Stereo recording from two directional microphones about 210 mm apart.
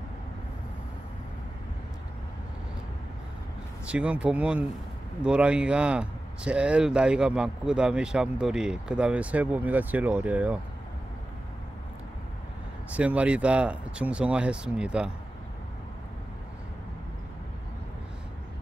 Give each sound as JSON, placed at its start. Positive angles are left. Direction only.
{"t": 3.8, "sound": "speech", "side_deg": -5}
{"t": 12.9, "sound": "speech", "side_deg": -5}